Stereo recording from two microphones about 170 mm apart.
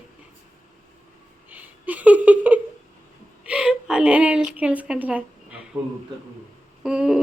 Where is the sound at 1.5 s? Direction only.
10° right (ahead or behind).